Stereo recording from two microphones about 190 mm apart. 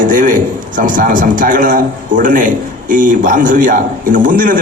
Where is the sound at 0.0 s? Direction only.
45° right (ahead or behind).